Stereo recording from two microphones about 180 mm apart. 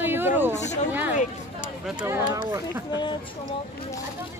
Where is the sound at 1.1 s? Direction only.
45° left (ahead or behind).